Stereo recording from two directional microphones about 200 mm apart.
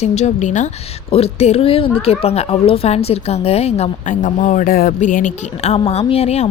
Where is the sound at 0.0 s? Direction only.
35° left (ahead or behind).